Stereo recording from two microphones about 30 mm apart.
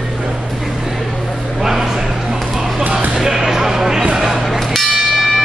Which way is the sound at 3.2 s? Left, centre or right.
Centre.